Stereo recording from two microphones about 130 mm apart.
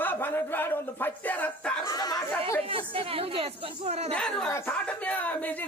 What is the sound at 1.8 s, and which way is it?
Speech, 30° left (ahead or behind).